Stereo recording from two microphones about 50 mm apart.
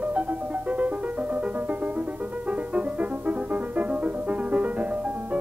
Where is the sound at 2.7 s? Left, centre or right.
Right.